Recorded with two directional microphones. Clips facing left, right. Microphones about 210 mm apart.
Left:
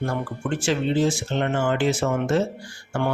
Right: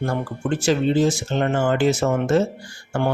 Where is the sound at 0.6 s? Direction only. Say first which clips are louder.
Right 3 dB; 40° right (ahead or behind).